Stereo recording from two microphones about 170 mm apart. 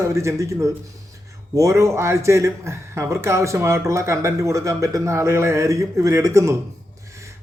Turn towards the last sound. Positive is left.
turn(degrees=-15)  # may be behind; listen again after turning